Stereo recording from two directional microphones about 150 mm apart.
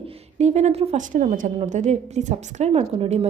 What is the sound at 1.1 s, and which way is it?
A woman's voice, 60° right (ahead or behind).